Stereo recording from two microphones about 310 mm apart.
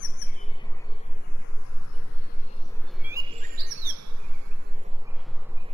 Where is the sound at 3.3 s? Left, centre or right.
Right.